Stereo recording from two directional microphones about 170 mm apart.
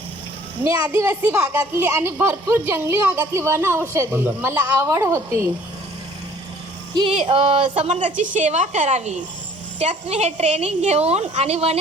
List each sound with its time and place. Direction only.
0.6 s a woman's voice: 10° right (ahead or behind)
6.9 s a sound: 30° right (ahead or behind)
7.3 s a woman's voice: 35° right (ahead or behind)